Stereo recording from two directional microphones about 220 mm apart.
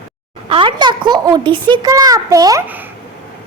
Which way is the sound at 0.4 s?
25° right (ahead or behind).